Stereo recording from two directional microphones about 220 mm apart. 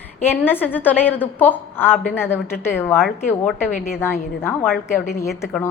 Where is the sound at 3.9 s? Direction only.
10° left (ahead or behind).